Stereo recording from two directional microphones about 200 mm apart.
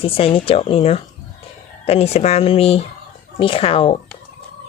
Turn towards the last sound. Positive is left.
turn(degrees=30)  # may be behind; listen again after turning